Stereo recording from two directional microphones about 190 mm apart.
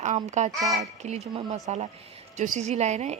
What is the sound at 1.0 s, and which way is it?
Speech, 35° right (ahead or behind).